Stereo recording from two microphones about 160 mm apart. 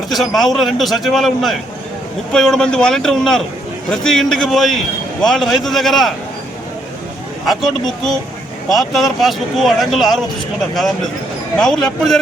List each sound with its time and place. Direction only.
0.1 s a man's voice: centre (ahead or behind)
7.4 s a man's voice: centre (ahead or behind)